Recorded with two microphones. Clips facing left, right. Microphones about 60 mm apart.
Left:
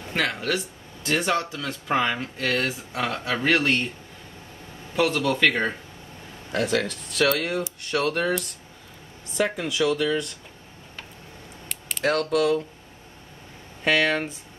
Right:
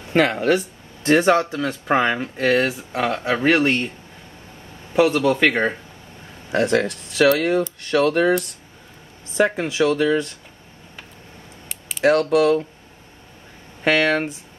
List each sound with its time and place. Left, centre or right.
0.1 s speech: right
4.9 s speech: centre
6.5 s speech: right
9.8 s speech: right
12.0 s speech: right
13.8 s speech: right